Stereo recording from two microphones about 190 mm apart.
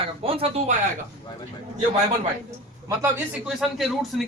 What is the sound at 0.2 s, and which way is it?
Speech, 30° right (ahead or behind).